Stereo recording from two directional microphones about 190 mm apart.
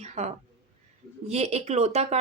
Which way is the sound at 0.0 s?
35° right (ahead or behind).